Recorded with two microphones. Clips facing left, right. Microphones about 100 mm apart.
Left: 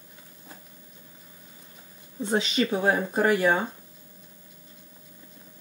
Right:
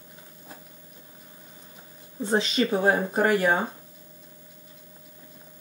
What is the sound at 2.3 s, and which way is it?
Speech, 30° right (ahead or behind).